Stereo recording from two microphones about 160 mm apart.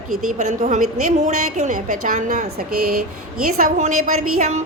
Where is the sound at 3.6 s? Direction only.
55° right (ahead or behind).